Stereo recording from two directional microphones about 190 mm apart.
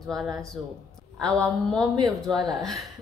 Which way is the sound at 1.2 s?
5° left (ahead or behind).